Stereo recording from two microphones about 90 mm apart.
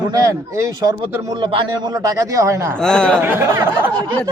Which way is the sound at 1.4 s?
80° right.